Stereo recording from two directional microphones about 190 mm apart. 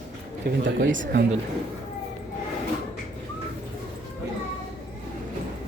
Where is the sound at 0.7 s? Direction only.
75° right (ahead or behind).